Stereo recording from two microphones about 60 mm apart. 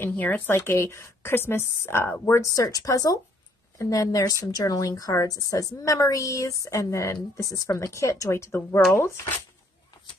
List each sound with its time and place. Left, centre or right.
0.5 s a woman's voice: left
2.5 s a woman's voice: left